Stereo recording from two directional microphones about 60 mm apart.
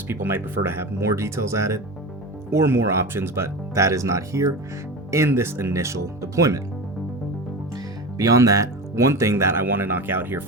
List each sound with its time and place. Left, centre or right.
0.1 s speech: right
2.6 s speech: right
5.1 s speech: right
8.2 s speech: right